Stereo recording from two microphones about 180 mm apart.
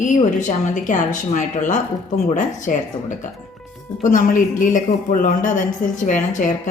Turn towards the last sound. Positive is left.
turn(degrees=45)  # may be behind; listen again after turning